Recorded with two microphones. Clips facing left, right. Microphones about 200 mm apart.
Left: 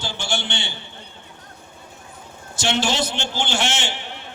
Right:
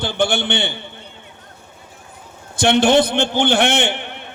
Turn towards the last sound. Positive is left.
turn(degrees=-60)  # may be behind; listen again after turning